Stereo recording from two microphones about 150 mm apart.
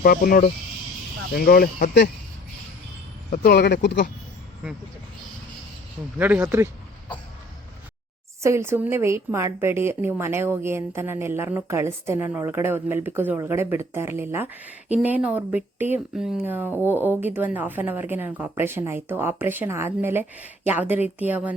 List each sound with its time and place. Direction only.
0.0 s speech: 75° left (ahead or behind)
3.3 s speech: 85° left
6.1 s a woman's voice: 10° right (ahead or behind)
8.4 s a woman's voice: 20° right (ahead or behind)